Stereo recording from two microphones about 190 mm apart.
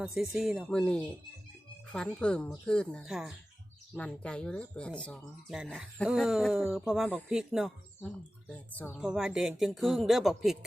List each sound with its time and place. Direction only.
0.0 s speech: 5° right (ahead or behind)
8.5 s speech: 10° left (ahead or behind)
9.0 s speech: 5° right (ahead or behind)